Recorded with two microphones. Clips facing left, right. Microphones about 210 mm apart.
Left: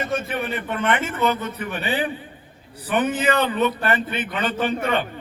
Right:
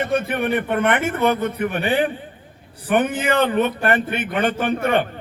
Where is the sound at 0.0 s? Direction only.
60° right (ahead or behind).